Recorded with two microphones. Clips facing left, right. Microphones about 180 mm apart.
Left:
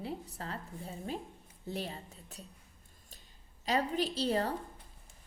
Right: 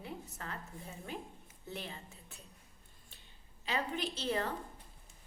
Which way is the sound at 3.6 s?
40° left (ahead or behind).